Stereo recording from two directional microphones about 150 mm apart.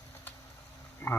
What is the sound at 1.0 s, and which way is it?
Speech, 20° left (ahead or behind).